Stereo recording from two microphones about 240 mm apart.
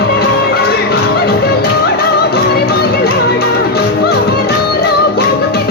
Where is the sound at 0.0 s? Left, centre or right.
Left.